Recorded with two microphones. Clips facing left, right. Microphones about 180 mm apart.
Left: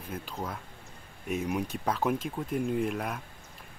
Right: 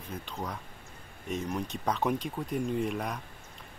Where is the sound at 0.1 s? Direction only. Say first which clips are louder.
Left 1 dB; 5° left (ahead or behind).